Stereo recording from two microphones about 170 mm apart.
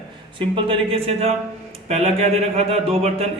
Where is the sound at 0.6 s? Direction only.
35° right (ahead or behind).